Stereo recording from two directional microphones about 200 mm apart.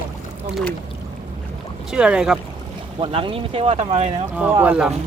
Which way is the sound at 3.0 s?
25° right (ahead or behind).